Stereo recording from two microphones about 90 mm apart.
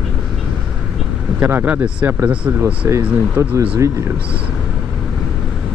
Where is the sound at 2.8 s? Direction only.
30° right (ahead or behind).